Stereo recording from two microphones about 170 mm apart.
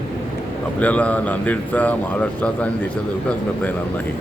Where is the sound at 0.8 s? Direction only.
10° left (ahead or behind).